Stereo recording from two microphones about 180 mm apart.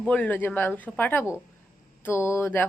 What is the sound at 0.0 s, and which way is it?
A woman's voice, 10° left (ahead or behind).